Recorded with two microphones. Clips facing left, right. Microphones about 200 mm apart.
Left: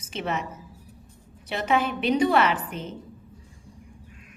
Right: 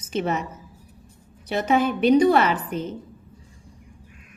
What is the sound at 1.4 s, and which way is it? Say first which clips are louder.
A woman's voice: right 4 dB; 40° right (ahead or behind).